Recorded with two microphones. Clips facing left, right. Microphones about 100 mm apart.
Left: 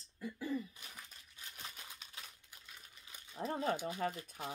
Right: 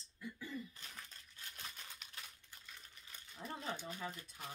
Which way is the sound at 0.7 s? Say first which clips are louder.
Even; 10° left (ahead or behind).